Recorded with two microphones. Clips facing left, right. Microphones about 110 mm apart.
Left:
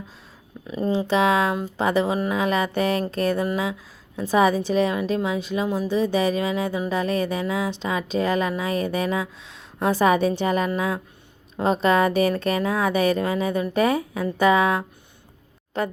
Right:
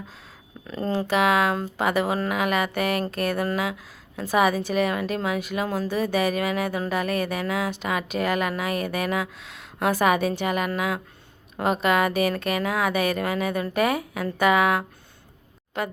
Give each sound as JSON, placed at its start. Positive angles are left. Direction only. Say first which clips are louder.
{"t": 0.7, "sound": "speech", "louder": "left 3 dB", "side_deg": 15}
{"t": 1.0, "sound": "a woman's voice", "louder": "even", "side_deg": 30}